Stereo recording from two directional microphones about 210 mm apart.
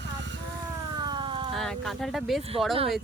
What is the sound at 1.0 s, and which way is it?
Siren, 20° right (ahead or behind).